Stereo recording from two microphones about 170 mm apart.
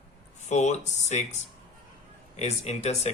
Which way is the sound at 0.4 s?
45° left (ahead or behind).